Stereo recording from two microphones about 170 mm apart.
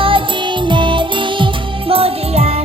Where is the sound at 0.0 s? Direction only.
30° right (ahead or behind).